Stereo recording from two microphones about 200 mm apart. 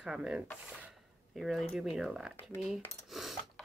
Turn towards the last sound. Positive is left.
turn(degrees=0)  # may be behind; listen again after turning